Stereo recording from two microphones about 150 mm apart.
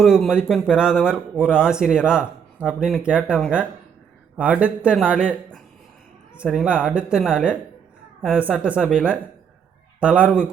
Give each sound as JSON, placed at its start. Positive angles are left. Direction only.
{"t": 0.0, "sound": "speech", "side_deg": 0}
{"t": 6.3, "sound": "speech", "side_deg": -5}